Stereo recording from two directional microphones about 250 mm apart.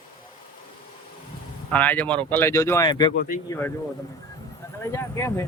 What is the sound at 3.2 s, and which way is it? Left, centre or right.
Speech, left.